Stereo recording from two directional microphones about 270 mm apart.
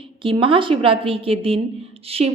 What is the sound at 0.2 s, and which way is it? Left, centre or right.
A woman's voice, centre.